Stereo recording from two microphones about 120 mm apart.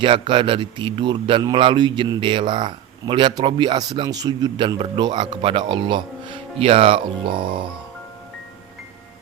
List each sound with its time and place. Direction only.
0.0 s speech: 45° right (ahead or behind)